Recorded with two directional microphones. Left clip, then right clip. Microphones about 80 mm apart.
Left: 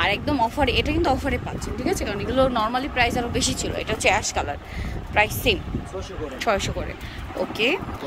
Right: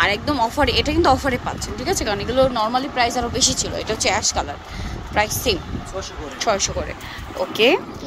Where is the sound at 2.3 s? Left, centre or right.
Left.